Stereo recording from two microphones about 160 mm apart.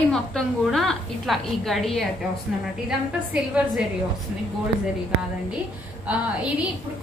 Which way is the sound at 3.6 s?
5° right (ahead or behind).